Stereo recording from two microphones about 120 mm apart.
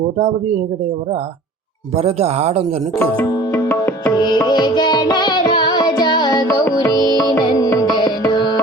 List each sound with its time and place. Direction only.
0.2 s speech: 65° right (ahead or behind)
2.0 s speech: 60° right (ahead or behind)
3.2 s music: 30° left (ahead or behind)